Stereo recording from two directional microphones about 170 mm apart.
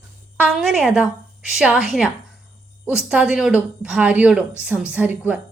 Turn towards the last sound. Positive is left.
turn(degrees=-10)  # may be behind; listen again after turning